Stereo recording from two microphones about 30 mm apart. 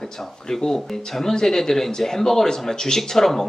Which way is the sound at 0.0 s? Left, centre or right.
Centre.